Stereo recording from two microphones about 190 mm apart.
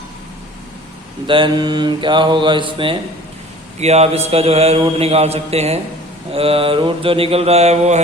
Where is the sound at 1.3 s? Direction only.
25° right (ahead or behind).